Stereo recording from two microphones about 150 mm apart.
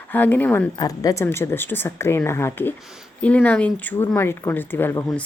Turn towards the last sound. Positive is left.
turn(degrees=15)  # may be behind; listen again after turning